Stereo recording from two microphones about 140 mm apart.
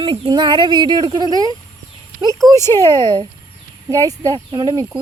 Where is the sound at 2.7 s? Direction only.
30° right (ahead or behind).